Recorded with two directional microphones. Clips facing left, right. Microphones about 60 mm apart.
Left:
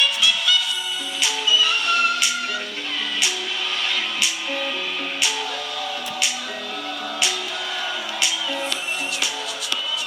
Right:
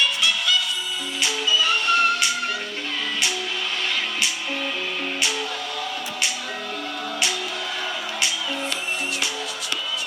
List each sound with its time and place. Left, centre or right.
0.0 s music: right
3.8 s music: right